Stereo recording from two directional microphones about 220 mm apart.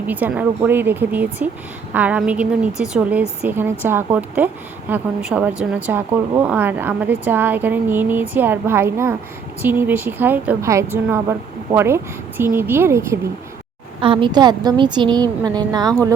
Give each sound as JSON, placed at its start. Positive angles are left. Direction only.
{"t": 0.1, "sound": "speech", "side_deg": -5}
{"t": 14.0, "sound": "a woman's voice", "side_deg": -20}